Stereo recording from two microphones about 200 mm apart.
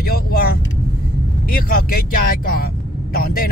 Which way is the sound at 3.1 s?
50° left (ahead or behind).